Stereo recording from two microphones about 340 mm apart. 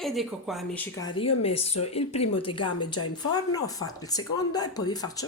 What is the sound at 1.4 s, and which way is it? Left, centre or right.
Speech, centre.